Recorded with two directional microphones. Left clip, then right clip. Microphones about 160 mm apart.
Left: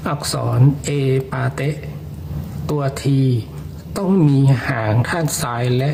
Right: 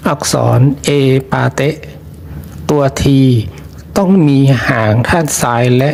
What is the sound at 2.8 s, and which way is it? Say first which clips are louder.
Speech: right 10 dB; 30° right (ahead or behind).